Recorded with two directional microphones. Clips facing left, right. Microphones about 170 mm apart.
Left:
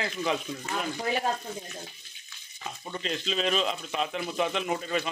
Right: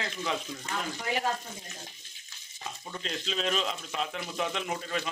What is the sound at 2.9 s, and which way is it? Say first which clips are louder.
Speech: left 4 dB; 5° left (ahead or behind).